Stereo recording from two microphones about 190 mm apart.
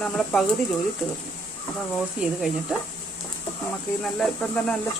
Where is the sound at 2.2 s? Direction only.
5° right (ahead or behind).